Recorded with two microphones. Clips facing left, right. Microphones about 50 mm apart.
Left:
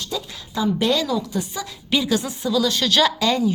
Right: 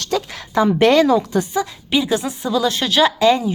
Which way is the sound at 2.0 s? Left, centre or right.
Right.